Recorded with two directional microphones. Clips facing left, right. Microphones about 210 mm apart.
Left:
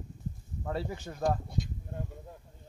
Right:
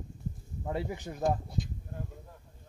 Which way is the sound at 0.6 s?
15° right (ahead or behind).